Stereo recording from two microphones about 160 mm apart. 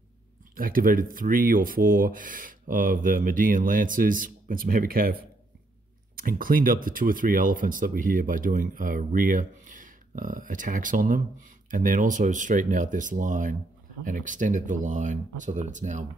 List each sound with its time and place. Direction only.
0.6 s speech: 60° right (ahead or behind)
6.1 s speech: 60° right (ahead or behind)